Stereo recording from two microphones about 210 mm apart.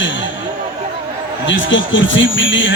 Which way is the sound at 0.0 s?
60° left (ahead or behind).